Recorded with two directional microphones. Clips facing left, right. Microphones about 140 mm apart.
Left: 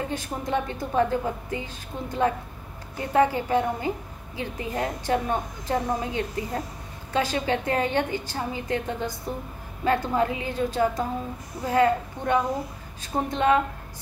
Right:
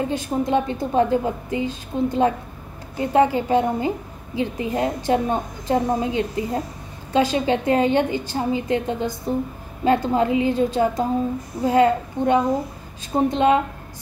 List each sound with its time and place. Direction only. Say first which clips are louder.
0.1 s a woman's voice: right 7 dB; 20° right (ahead or behind)